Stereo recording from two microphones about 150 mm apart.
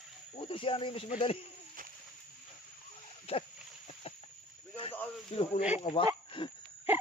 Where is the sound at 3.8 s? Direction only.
40° left (ahead or behind).